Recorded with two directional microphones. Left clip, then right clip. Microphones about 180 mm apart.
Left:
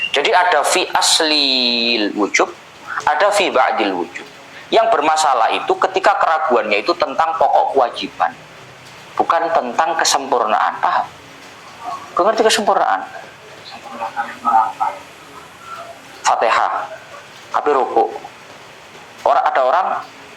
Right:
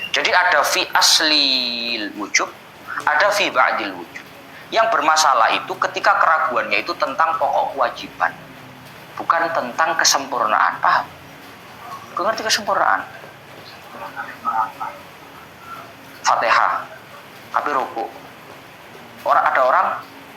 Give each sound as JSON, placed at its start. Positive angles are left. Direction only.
{"t": 0.1, "sound": "speech", "side_deg": -5}
{"t": 12.1, "sound": "speech", "side_deg": -5}
{"t": 14.2, "sound": "speech", "side_deg": -15}
{"t": 16.2, "sound": "speech", "side_deg": -5}
{"t": 19.3, "sound": "speech", "side_deg": -10}